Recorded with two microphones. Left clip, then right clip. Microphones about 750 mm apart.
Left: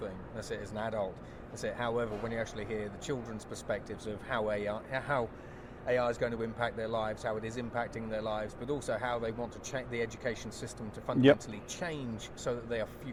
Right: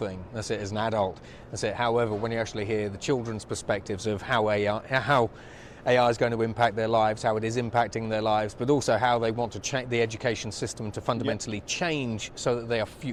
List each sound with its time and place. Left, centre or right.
0.6 s speech: right